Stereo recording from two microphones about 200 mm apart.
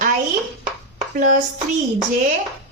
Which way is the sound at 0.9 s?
40° right (ahead or behind).